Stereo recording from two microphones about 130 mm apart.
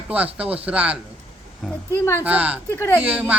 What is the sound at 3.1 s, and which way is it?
Speech, 10° right (ahead or behind).